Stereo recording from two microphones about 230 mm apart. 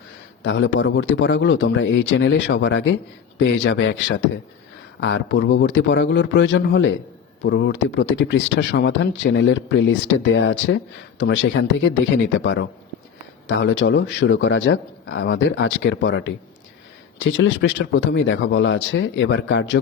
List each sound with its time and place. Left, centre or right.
0.4 s a man's voice: left